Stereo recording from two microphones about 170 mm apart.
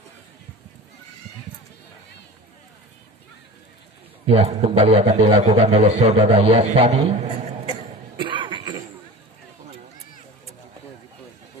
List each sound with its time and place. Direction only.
4.3 s a man's voice: 35° right (ahead or behind)
8.2 s cough: 30° right (ahead or behind)